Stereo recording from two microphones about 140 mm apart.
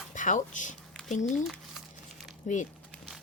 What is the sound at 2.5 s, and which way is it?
Speech, 60° left (ahead or behind).